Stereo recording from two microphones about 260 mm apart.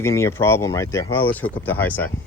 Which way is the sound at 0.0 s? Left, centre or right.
Centre.